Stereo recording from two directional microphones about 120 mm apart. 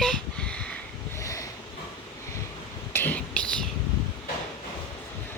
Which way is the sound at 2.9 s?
15° left (ahead or behind).